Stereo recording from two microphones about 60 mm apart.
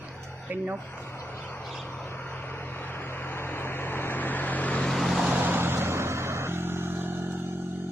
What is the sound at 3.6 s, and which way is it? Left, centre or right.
Vehicle, left.